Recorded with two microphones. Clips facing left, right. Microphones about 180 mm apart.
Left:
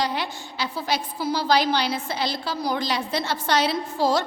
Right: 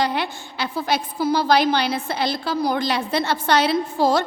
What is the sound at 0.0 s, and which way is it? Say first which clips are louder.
A woman's voice: right 4 dB; 60° right (ahead or behind).